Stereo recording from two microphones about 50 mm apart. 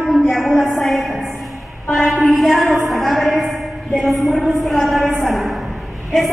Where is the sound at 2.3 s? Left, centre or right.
Centre.